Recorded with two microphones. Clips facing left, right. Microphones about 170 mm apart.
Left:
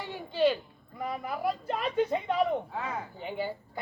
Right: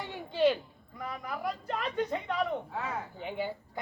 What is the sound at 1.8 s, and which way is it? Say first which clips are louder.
Speech: left 4 dB; 10° left (ahead or behind).